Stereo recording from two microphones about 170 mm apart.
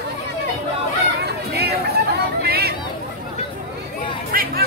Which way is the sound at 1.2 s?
70° right (ahead or behind).